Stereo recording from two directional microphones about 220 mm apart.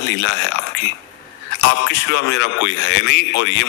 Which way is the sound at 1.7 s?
55° left (ahead or behind).